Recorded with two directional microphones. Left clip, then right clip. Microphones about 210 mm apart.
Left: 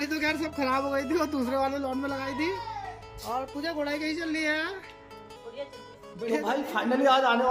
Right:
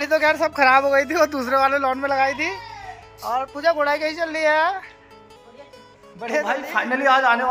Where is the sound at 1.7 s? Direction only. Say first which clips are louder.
Right 11 dB; 5° right (ahead or behind).